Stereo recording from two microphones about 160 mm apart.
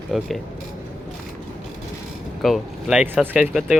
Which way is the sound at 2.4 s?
Centre (ahead or behind).